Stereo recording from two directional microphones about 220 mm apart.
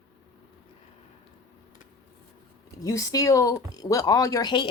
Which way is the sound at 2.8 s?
15° left (ahead or behind).